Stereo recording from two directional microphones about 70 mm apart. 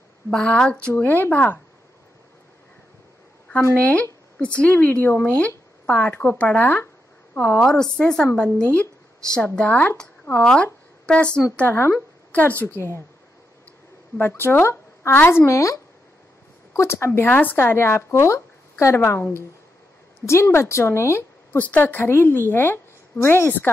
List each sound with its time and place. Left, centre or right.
0.3 s a woman's voice: centre
3.7 s a woman's voice: left
11.5 s a woman's voice: left
14.1 s a woman's voice: left
15.4 s a woman's voice: left
17.3 s a woman's voice: left
20.5 s a woman's voice: left
21.5 s a woman's voice: left